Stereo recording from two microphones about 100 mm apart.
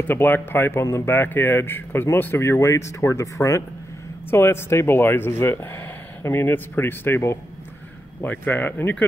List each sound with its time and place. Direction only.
0.1 s speech: 20° left (ahead or behind)